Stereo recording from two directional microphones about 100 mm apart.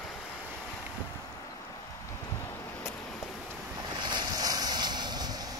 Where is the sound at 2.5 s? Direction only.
25° left (ahead or behind).